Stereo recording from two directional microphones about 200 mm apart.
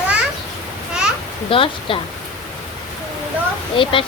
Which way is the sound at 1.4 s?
25° left (ahead or behind).